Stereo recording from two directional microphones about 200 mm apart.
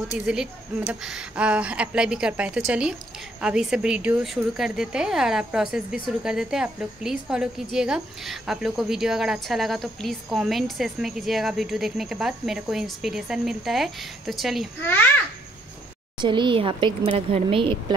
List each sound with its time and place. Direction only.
0.3 s a woman's voice: 5° right (ahead or behind)
16.2 s speech: 25° right (ahead or behind)